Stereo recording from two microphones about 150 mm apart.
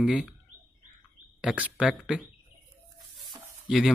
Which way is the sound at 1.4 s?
10° right (ahead or behind).